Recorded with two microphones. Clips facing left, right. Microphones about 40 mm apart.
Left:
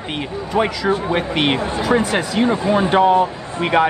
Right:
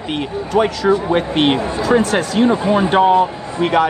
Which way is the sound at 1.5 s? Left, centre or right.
Left.